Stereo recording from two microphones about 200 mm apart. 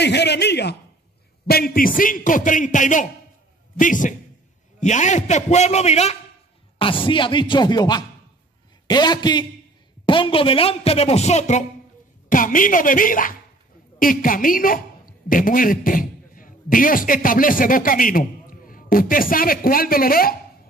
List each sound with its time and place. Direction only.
0.0 s a man's voice: 55° left (ahead or behind)